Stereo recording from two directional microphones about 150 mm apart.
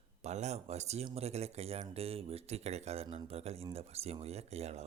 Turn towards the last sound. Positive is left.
turn(degrees=-45)  # may be behind; listen again after turning